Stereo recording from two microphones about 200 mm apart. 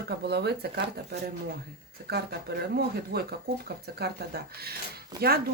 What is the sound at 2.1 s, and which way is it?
A man's voice, 55° right (ahead or behind).